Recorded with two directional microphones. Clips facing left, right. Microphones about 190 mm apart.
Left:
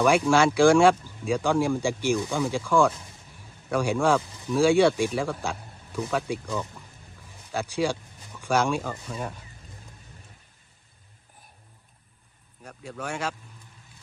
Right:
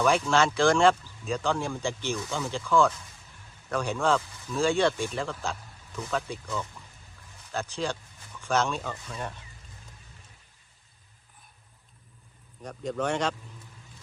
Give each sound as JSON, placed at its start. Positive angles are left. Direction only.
{"t": 0.0, "sound": "speech", "side_deg": 10}
{"t": 12.6, "sound": "speech", "side_deg": 5}